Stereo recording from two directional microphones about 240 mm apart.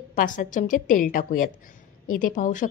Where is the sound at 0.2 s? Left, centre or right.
Left.